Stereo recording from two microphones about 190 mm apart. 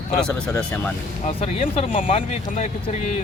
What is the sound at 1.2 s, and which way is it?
Speech, 30° left (ahead or behind).